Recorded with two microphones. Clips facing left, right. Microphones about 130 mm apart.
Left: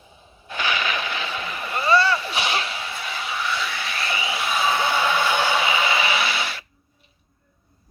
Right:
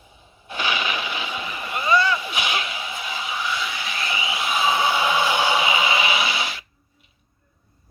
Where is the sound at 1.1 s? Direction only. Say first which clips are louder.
Even; 15° right (ahead or behind).